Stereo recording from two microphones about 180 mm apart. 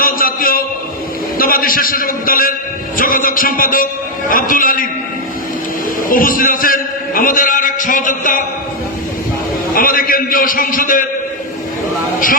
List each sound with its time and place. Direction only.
0.0 s a sound: 50° left (ahead or behind)
1.4 s a man's voice: 50° left (ahead or behind)
6.1 s a man's voice: 50° left (ahead or behind)
9.7 s a man's voice: 50° left (ahead or behind)